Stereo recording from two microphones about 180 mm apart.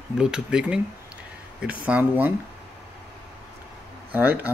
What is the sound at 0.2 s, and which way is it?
Speech, 5° right (ahead or behind).